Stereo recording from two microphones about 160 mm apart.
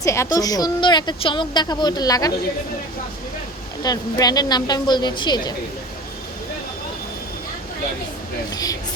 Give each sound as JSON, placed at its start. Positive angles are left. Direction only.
{"t": 0.0, "sound": "a woman's voice", "side_deg": 20}
{"t": 3.8, "sound": "a woman's voice", "side_deg": 25}
{"t": 8.5, "sound": "a woman's voice", "side_deg": 20}